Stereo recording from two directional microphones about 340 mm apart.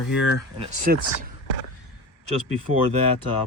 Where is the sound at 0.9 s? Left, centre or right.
Right.